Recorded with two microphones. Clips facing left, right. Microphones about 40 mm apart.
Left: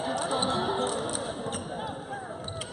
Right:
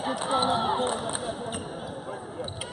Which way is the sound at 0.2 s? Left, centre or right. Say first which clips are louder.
Right 6 dB; right.